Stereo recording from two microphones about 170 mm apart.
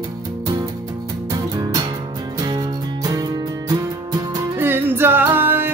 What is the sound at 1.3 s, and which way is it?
Music, 20° right (ahead or behind).